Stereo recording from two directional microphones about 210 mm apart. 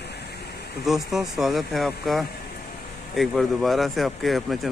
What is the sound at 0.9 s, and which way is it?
Speech, centre (ahead or behind).